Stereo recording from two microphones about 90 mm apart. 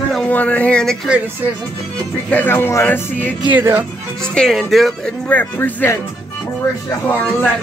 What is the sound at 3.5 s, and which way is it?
Speech, 20° right (ahead or behind).